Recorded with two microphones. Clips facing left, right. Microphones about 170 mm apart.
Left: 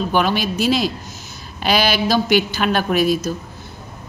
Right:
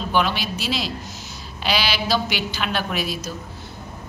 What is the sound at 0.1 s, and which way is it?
A woman's voice, 45° left (ahead or behind).